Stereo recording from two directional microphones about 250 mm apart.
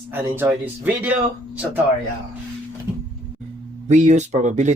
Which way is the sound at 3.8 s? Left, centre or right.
Right.